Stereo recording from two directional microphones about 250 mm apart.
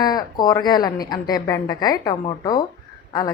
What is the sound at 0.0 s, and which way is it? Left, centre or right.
A woman's voice, centre.